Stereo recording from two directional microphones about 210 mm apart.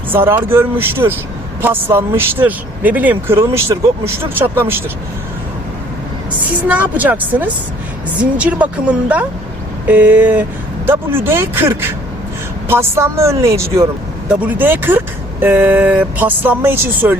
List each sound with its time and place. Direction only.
0.1 s speech: 10° right (ahead or behind)
6.7 s speech: 5° right (ahead or behind)